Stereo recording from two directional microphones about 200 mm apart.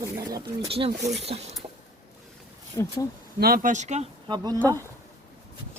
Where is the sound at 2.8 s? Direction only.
15° left (ahead or behind).